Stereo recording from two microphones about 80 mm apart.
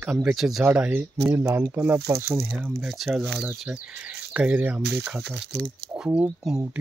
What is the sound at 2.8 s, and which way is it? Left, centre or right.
Speech, centre.